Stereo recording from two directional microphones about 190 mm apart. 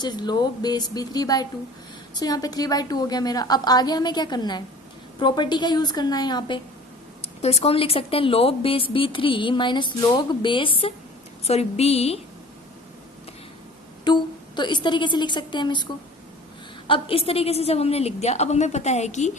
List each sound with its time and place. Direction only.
0.0 s a woman's voice: 20° left (ahead or behind)
7.4 s a woman's voice: 30° left (ahead or behind)
14.0 s a woman's voice: 25° left (ahead or behind)